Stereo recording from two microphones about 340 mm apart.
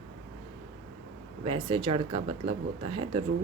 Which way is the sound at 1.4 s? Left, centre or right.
Centre.